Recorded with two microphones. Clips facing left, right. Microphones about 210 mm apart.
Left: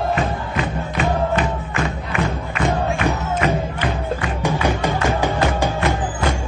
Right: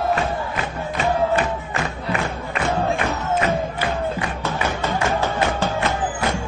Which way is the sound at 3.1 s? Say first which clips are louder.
Left 1 dB; 15° left (ahead or behind).